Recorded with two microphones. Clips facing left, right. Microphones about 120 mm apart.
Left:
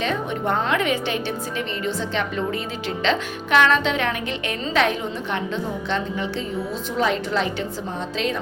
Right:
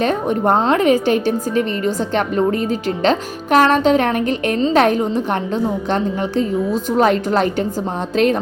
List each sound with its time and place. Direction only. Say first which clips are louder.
0.0 s a woman's voice: right 7 dB; 45° right (ahead or behind)